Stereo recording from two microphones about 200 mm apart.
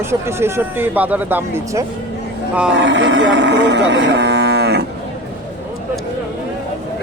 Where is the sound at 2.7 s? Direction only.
65° right (ahead or behind).